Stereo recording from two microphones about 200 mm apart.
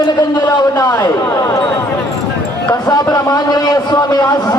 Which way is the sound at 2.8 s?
20° left (ahead or behind).